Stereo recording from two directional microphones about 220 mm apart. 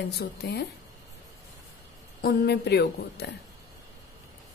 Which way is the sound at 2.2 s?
45° left (ahead or behind).